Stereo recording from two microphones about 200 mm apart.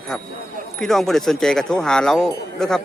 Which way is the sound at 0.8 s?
Centre (ahead or behind).